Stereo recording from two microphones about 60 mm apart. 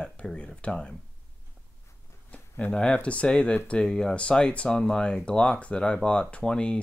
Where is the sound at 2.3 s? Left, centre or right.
Left.